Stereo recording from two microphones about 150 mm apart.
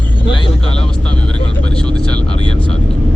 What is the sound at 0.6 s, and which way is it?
Speech, 5° left (ahead or behind).